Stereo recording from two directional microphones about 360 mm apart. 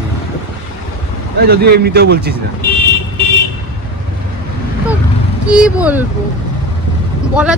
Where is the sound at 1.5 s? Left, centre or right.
Right.